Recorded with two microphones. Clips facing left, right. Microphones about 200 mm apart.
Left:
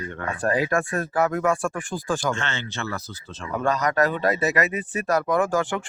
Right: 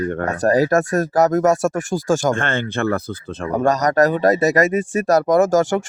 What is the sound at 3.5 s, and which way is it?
Speech, 40° right (ahead or behind).